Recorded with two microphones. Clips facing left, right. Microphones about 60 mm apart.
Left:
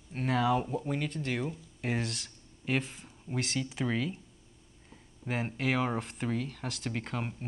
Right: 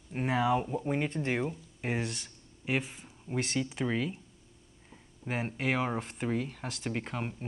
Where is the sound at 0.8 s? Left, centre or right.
Right.